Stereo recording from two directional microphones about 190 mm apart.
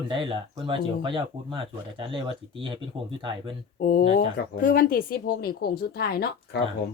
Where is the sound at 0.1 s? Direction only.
25° right (ahead or behind).